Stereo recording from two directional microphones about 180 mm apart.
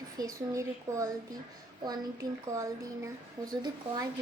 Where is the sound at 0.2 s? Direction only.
20° right (ahead or behind).